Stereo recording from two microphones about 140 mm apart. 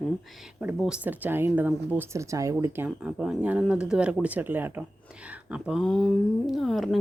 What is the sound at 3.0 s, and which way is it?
Speech, 5° right (ahead or behind).